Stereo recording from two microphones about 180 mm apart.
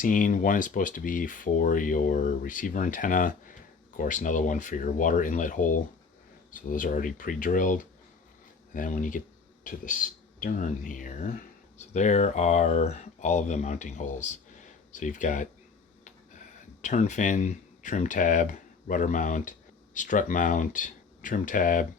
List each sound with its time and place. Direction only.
0.0 s speech: 45° left (ahead or behind)